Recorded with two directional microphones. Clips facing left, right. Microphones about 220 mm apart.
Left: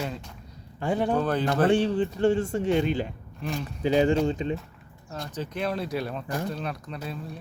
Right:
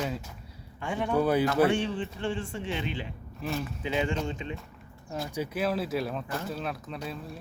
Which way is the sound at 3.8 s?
40° left (ahead or behind).